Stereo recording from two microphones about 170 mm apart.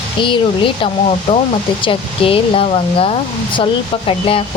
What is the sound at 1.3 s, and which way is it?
Speech, 40° left (ahead or behind).